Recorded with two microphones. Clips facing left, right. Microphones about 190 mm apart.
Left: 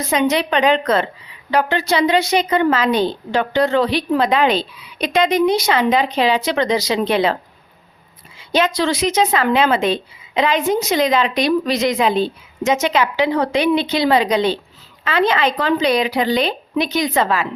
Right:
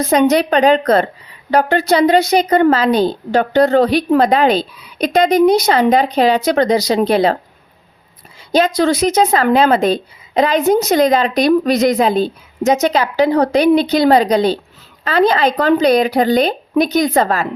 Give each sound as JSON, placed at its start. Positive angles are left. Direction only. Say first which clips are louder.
{"t": 0.0, "sound": "speech", "louder": "right 5 dB", "side_deg": -40}
{"t": 8.4, "sound": "a woman's voice", "louder": "right 4 dB", "side_deg": -40}